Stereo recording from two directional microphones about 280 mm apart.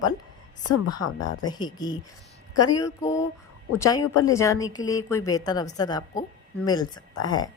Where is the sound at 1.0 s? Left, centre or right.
Left.